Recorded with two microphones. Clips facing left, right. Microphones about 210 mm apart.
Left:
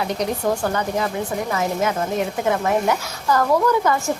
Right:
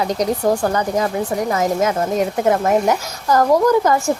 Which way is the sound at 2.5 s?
40° right (ahead or behind).